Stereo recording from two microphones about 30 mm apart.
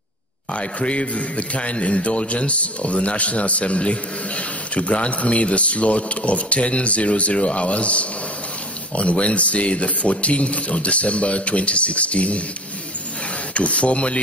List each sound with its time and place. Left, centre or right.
0.6 s a man's voice: left
13.6 s a man's voice: left